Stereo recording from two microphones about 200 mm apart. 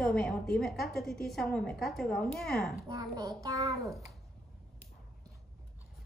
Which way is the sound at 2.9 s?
15° right (ahead or behind).